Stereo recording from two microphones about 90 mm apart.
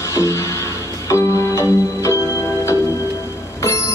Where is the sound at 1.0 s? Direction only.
35° left (ahead or behind).